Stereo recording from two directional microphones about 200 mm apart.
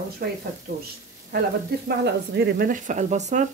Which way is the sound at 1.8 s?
55° right (ahead or behind).